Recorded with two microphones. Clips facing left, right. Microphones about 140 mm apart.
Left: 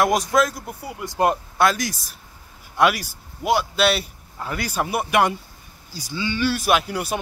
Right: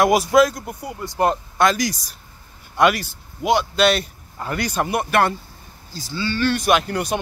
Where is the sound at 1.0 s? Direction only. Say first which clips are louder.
Even; 15° left (ahead or behind).